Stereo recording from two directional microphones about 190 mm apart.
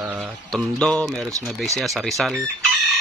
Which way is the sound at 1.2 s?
15° right (ahead or behind).